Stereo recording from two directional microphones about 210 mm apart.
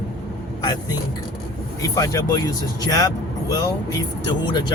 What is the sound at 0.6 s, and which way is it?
Speech, 20° left (ahead or behind).